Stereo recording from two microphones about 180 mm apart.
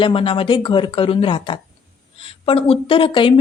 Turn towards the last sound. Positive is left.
turn(degrees=30)  # may be behind; listen again after turning